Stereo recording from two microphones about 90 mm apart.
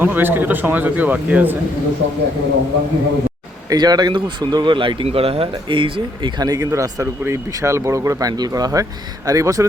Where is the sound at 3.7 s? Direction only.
50° right (ahead or behind); by 6.3 s 70° right (ahead or behind).